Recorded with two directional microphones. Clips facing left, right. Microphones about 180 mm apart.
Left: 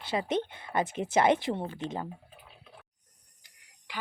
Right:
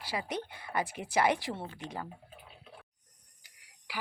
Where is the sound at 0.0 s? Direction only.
25° left (ahead or behind).